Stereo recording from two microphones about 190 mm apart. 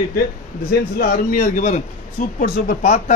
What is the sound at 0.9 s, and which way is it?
A man's voice, 50° left (ahead or behind).